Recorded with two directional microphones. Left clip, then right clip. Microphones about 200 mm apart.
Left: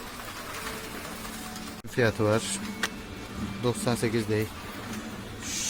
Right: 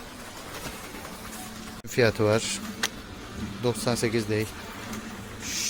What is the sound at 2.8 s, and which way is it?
Vehicle, 5° left (ahead or behind).